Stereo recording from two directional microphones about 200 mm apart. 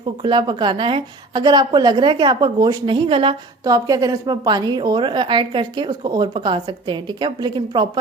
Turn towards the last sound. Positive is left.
turn(degrees=-25)  # may be behind; listen again after turning